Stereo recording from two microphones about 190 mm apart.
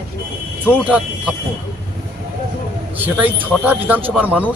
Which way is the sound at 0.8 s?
5° right (ahead or behind).